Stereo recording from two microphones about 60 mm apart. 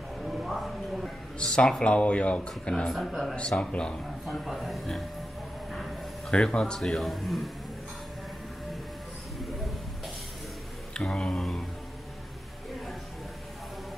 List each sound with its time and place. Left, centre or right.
0.2 s music: centre
1.4 s speech: centre
2.7 s a man's voice: centre
3.3 s speech: centre
4.3 s a man's voice: centre
5.7 s a sound: centre
6.3 s a man's voice: centre
10.9 s speech: centre